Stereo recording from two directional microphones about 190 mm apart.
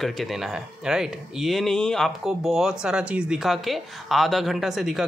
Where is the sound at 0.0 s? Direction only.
Centre (ahead or behind).